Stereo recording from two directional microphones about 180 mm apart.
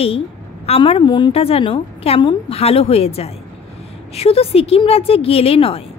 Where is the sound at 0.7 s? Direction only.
30° left (ahead or behind).